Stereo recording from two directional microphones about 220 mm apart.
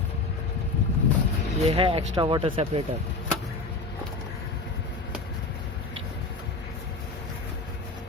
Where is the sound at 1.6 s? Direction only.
25° right (ahead or behind).